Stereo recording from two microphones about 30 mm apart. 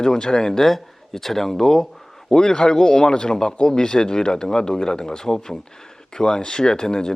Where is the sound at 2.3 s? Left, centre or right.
Left.